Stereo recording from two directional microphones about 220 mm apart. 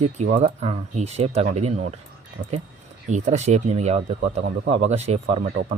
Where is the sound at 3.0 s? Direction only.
30° right (ahead or behind).